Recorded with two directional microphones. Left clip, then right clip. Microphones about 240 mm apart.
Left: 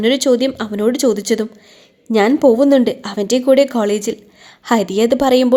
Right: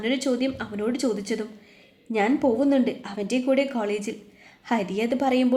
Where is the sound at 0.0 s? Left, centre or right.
Left.